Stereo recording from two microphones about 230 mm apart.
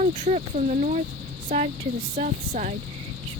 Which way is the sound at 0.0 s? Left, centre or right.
Right.